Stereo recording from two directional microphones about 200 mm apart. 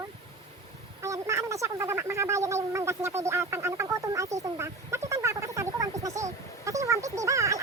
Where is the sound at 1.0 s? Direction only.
15° right (ahead or behind).